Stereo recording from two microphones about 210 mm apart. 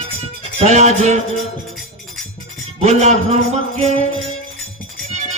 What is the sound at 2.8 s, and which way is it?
Speech, 30° right (ahead or behind).